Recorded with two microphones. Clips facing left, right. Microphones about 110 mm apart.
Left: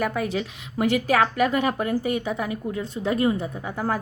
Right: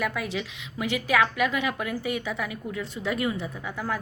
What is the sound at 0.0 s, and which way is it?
A woman's voice, 35° left (ahead or behind).